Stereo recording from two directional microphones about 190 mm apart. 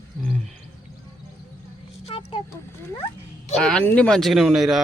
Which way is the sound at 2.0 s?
30° left (ahead or behind).